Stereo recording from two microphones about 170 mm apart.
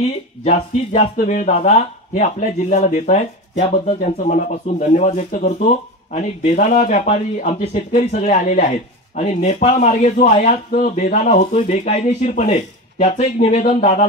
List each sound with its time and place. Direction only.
1.1 s speech: 45° left (ahead or behind)